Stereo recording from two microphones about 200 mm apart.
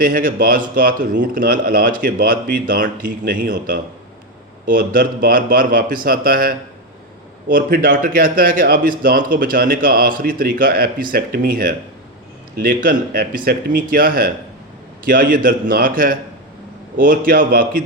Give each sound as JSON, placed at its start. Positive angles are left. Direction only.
{"t": 0.0, "sound": "speech", "side_deg": -45}